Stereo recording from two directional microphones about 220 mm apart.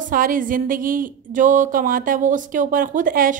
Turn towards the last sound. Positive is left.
turn(degrees=-40)  # may be behind; listen again after turning